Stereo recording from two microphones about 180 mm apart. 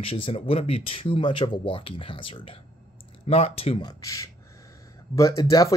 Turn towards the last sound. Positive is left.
turn(degrees=20)  # may be behind; listen again after turning